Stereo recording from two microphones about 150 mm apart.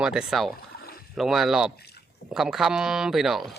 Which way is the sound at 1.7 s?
90° left.